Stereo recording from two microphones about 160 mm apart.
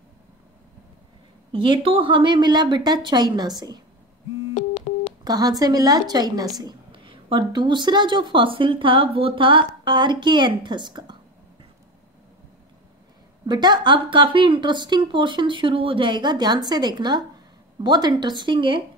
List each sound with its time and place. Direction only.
1.5 s speech: 35° right (ahead or behind)
4.6 s a sound: 45° left (ahead or behind)
5.2 s speech: 25° right (ahead or behind)
13.5 s speech: 25° right (ahead or behind)